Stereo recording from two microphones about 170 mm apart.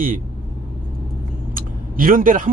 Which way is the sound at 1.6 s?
55° right (ahead or behind).